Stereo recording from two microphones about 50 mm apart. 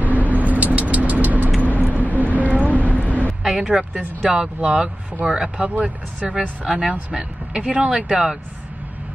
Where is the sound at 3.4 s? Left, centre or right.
Centre.